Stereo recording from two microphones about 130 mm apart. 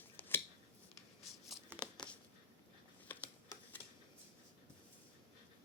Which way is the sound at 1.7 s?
15° right (ahead or behind).